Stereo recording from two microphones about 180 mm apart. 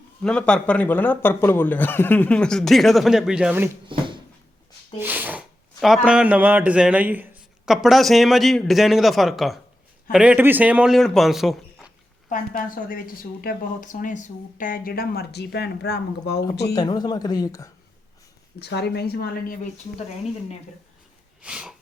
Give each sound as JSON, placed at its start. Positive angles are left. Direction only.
{"t": 0.2, "sound": "a man's voice", "side_deg": 5}
{"t": 3.8, "sound": "a sound", "side_deg": -25}
{"t": 4.9, "sound": "a man's voice", "side_deg": -10}
{"t": 12.3, "sound": "speech", "side_deg": 50}
{"t": 16.7, "sound": "speech", "side_deg": 20}
{"t": 18.6, "sound": "speech", "side_deg": 65}
{"t": 21.4, "sound": "a man's voice", "side_deg": -5}